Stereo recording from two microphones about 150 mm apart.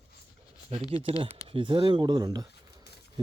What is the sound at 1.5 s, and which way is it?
Speech, 35° right (ahead or behind).